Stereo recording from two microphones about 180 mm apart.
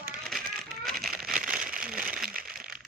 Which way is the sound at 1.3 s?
50° right (ahead or behind).